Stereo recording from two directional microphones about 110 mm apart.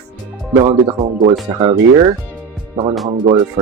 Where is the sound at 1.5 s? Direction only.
40° right (ahead or behind).